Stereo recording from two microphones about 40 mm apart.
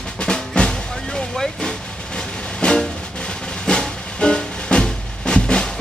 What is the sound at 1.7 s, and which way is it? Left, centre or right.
Music, left.